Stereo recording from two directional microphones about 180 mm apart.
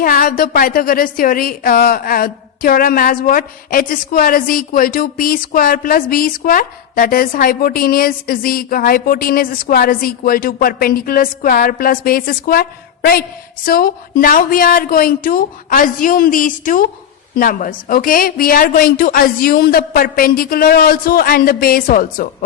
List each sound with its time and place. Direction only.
0.0 s a woman's voice: 50° left (ahead or behind)
13.7 s a woman's voice: 50° left (ahead or behind)